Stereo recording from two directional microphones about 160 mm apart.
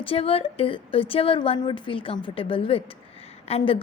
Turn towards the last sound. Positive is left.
turn(degrees=40)  # may be behind; listen again after turning